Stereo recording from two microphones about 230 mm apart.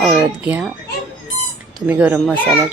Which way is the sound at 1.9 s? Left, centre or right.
Centre.